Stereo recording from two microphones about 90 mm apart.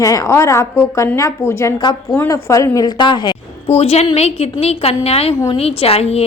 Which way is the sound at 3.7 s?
90° left.